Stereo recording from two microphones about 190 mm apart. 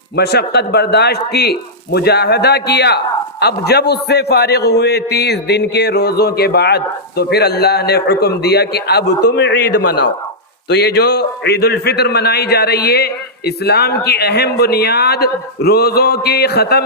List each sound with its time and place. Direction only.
0.2 s a man's voice: 60° left (ahead or behind)